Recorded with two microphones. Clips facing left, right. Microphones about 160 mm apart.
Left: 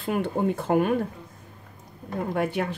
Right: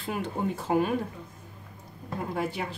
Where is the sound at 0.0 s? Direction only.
55° left (ahead or behind).